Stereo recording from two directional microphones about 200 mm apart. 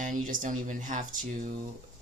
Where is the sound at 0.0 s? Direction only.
40° right (ahead or behind).